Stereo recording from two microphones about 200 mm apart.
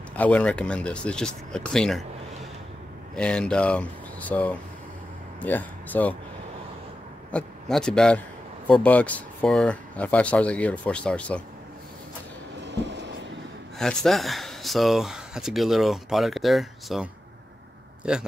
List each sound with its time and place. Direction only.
0.1 s speech: 5° left (ahead or behind)
3.2 s speech: 5° left (ahead or behind)
7.3 s speech: 5° left (ahead or behind)
12.6 s a sound: 60° right (ahead or behind)
13.7 s speech: centre (ahead or behind)